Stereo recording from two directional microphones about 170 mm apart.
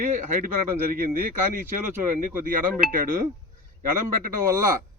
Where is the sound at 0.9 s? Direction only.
55° right (ahead or behind).